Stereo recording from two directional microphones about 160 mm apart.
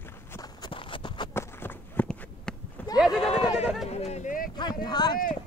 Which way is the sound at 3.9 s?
40° left (ahead or behind).